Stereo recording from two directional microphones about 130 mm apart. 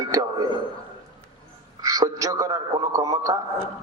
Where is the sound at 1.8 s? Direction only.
25° right (ahead or behind).